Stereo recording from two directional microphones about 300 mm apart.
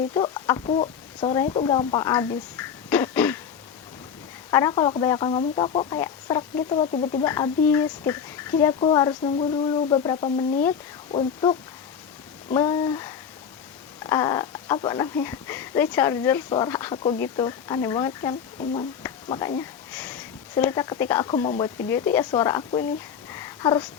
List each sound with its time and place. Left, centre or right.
0.1 s speech: centre
4.5 s speech: centre
23.3 s a sound: centre